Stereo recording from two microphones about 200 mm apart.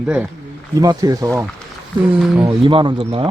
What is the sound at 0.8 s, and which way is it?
Speech, 20° right (ahead or behind).